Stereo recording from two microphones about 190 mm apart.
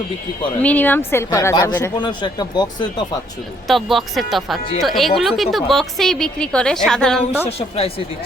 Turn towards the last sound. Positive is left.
turn(degrees=30)  # may be behind; listen again after turning